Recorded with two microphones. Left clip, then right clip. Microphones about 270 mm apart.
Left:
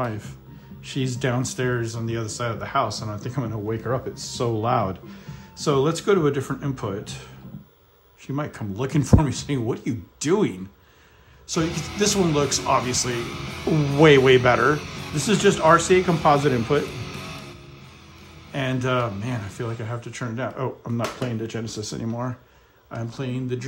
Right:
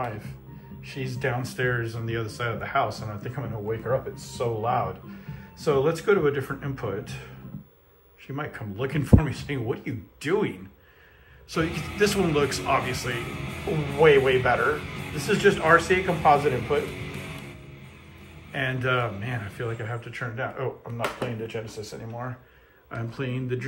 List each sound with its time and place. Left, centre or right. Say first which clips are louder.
1.0 s speech: left 3 dB; left
5.6 s speech: left 1 dB; left
8.4 s speech: left 2 dB; left
11.7 s speech: left 2 dB; centre
12.0 s speech: left 1 dB; centre
13.3 s speech: left 2 dB; centre
14.0 s speech: left 4 dB; left
14.8 s speech: left 2 dB; centre
15.1 s speech: left 2 dB; left
17.0 s music: left 2 dB; centre
18.5 s speech: left 1 dB; centre
21.5 s speech: left 3 dB; left
22.8 s speech: left 1 dB; centre